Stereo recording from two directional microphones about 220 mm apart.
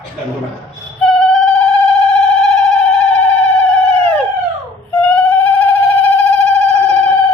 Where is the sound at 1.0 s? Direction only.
Centre (ahead or behind).